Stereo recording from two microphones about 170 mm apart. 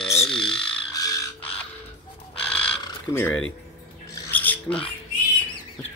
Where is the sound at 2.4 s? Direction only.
5° left (ahead or behind).